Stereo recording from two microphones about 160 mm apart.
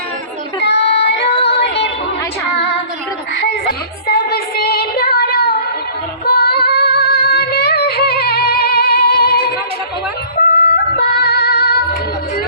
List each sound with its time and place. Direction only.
0.6 s female singing: 90° left
1.5 s music: 90° left
3.3 s female singing: 90° left
10.4 s yodeling: 55° left (ahead or behind)
10.9 s music: 80° left